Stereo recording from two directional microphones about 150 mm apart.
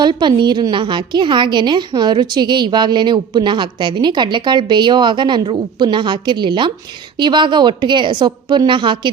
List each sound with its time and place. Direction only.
0.0 s a woman's voice: 30° right (ahead or behind)